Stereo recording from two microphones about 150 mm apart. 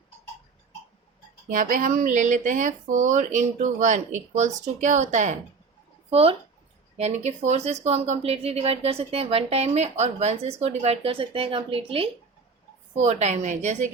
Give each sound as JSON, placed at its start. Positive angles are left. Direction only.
{"t": 1.5, "sound": "speech", "side_deg": -60}
{"t": 6.1, "sound": "speech", "side_deg": -40}